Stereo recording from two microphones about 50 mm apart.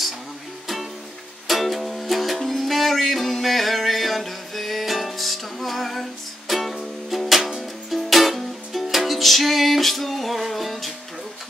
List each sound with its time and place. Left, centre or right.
1.5 s music: centre